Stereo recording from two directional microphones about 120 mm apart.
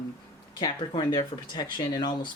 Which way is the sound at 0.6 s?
40° left (ahead or behind).